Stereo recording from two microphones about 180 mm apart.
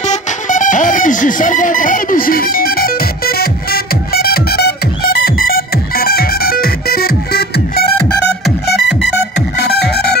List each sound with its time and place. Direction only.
0.0 s music: 45° left (ahead or behind); by 9.1 s 65° left (ahead or behind)